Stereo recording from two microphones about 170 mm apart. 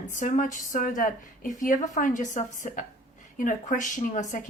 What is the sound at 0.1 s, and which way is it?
Speech, 50° left (ahead or behind).